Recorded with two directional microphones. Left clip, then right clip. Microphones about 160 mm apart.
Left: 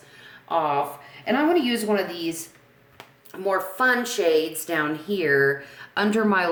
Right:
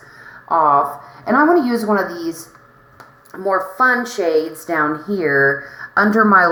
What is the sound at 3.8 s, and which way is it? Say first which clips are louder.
Speech: right 6 dB; 30° left (ahead or behind).